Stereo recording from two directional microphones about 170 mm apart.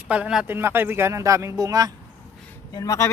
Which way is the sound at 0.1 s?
5° right (ahead or behind).